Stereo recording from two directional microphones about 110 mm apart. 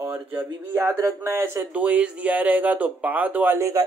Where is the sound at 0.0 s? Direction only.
20° right (ahead or behind).